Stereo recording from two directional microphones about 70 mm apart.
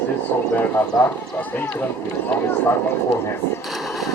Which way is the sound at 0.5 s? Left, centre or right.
Left.